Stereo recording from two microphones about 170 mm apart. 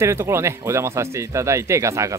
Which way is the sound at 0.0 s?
15° right (ahead or behind).